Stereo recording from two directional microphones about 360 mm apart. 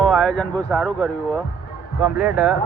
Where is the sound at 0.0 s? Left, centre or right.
Centre.